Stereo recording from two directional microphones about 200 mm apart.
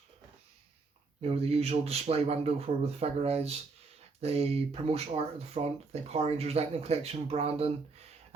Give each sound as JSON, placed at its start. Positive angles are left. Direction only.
{"t": 1.2, "sound": "speech", "side_deg": -30}